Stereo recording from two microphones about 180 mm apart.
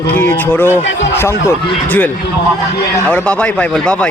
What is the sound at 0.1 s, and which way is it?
Speech, 10° left (ahead or behind).